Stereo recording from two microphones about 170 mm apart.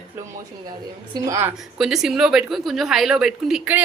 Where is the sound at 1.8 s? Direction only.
5° right (ahead or behind).